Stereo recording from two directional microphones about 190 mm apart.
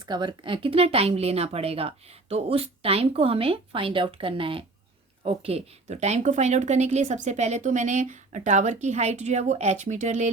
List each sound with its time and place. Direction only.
0.0 s a woman's voice: 25° right (ahead or behind); by 10.2 s 40° right (ahead or behind)